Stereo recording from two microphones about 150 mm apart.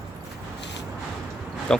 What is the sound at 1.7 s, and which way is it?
Speech, 5° left (ahead or behind).